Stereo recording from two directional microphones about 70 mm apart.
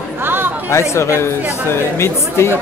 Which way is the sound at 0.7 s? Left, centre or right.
Left.